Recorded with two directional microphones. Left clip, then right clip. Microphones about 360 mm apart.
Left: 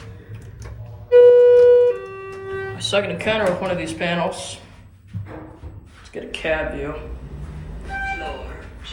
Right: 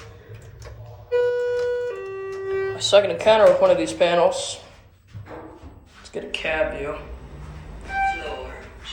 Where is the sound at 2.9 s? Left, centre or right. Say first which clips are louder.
Right 5 dB; centre.